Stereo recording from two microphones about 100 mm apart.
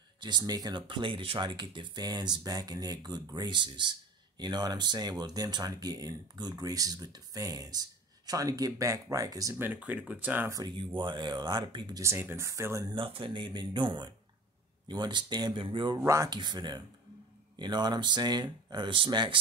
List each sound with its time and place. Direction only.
0.2 s speech: 45° right (ahead or behind)
9.6 s speech: 15° right (ahead or behind)
11.0 s speech: 50° right (ahead or behind)
12.0 s speech: 25° right (ahead or behind)
12.9 s speech: 60° right (ahead or behind)